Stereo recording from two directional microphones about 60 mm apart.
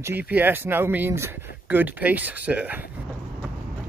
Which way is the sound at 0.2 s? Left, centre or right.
Right.